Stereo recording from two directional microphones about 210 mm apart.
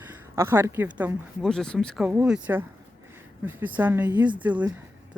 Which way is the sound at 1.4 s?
5° left (ahead or behind).